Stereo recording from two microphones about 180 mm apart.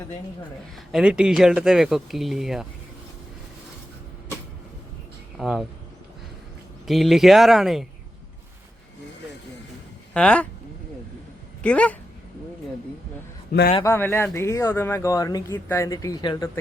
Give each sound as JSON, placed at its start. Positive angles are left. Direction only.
{"t": 0.9, "sound": "speech", "side_deg": -5}
{"t": 5.4, "sound": "speech", "side_deg": 0}
{"t": 6.8, "sound": "speech", "side_deg": 0}
{"t": 10.2, "sound": "speech", "side_deg": 5}
{"t": 11.6, "sound": "speech", "side_deg": 5}
{"t": 13.5, "sound": "a man's voice", "side_deg": 55}
{"t": 13.8, "sound": "speech", "side_deg": 15}